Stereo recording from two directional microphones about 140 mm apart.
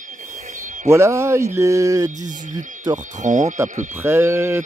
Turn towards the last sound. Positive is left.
turn(degrees=-15)  # may be behind; listen again after turning